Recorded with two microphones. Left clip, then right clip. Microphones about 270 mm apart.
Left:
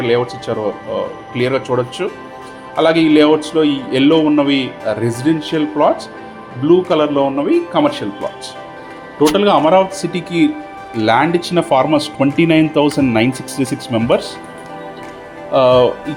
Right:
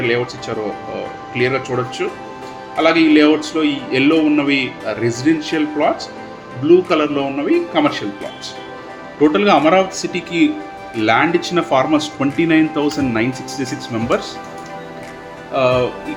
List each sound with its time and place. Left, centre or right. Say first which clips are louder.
0.0 s speech: left 3 dB; centre
9.3 s speech: left 2 dB; centre
15.5 s speech: left 5 dB; centre